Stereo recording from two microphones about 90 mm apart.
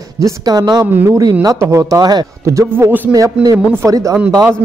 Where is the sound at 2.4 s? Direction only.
35° right (ahead or behind).